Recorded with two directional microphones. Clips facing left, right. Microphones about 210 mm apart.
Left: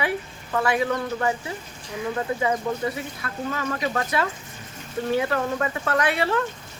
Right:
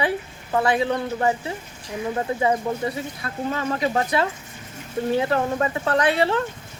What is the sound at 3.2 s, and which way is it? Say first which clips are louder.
Speech: right 4 dB; 30° right (ahead or behind).